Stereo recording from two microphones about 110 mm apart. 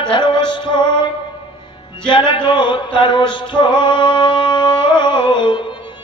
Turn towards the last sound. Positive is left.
turn(degrees=45)  # may be behind; listen again after turning